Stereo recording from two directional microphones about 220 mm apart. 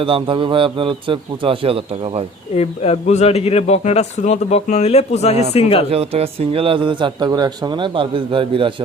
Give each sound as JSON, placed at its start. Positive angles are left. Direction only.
{"t": 0.0, "sound": "speech", "side_deg": -25}
{"t": 2.6, "sound": "speech", "side_deg": 30}
{"t": 5.9, "sound": "speech", "side_deg": -25}